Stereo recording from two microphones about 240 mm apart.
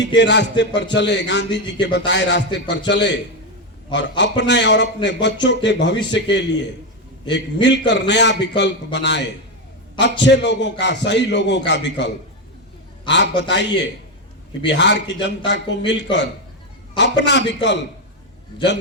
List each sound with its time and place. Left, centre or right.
0.0 s a man's voice: left
4.2 s a man's voice: left
14.7 s a man's voice: left